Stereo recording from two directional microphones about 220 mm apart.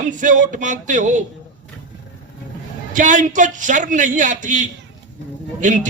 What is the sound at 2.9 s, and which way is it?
A man's voice, 35° right (ahead or behind).